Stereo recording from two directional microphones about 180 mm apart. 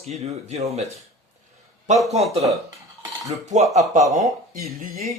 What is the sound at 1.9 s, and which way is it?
Speech, 40° right (ahead or behind).